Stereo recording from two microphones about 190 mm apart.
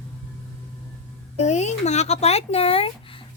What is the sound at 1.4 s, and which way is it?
A child's voice, 35° left (ahead or behind).